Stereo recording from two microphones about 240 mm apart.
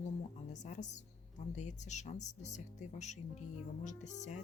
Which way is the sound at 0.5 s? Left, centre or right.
Left.